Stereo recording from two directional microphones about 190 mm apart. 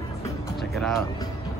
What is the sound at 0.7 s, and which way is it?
Speech, centre (ahead or behind).